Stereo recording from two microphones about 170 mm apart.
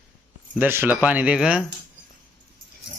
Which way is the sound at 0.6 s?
10° right (ahead or behind).